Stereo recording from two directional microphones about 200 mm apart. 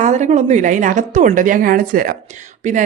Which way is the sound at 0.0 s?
35° right (ahead or behind).